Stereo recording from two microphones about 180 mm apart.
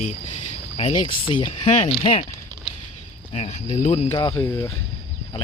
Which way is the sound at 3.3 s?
35° left (ahead or behind).